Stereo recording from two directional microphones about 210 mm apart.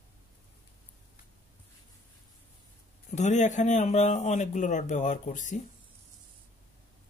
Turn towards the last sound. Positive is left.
turn(degrees=35)  # may be behind; listen again after turning